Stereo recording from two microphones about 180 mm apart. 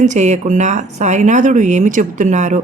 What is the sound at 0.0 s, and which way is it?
A woman's voice, 40° right (ahead or behind).